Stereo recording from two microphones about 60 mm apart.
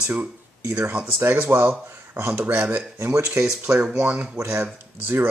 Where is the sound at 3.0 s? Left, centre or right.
Right.